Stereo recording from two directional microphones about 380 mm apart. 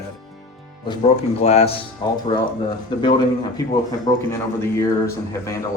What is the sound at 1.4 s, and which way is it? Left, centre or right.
Speech, centre.